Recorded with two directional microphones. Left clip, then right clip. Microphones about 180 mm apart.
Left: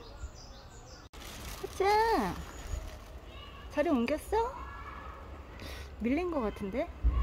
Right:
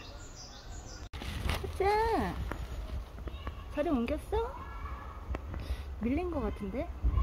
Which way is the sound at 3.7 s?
20° left (ahead or behind).